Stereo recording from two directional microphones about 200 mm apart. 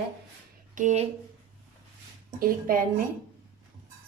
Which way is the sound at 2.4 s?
45° right (ahead or behind).